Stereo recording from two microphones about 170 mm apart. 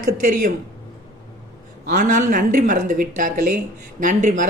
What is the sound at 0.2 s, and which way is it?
Speech, 50° right (ahead or behind).